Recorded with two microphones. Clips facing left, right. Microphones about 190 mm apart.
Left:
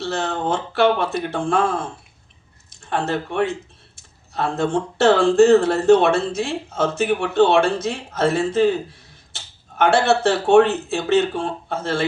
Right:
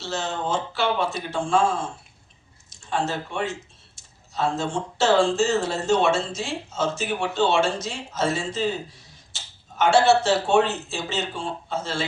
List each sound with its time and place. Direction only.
0.0 s speech: 60° left (ahead or behind)